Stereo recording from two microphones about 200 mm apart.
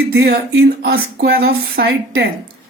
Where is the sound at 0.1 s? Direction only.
55° right (ahead or behind).